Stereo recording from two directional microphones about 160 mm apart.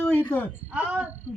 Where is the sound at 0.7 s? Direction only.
5° right (ahead or behind).